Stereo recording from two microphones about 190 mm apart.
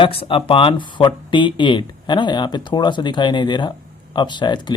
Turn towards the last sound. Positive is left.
turn(degrees=25)  # may be behind; listen again after turning